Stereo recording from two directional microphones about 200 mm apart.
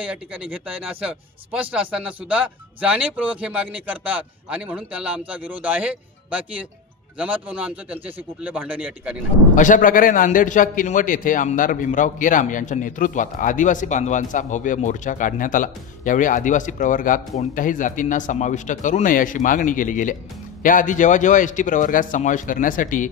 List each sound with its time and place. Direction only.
0.0 s speech: 5° right (ahead or behind)
9.6 s a man's voice: 40° left (ahead or behind)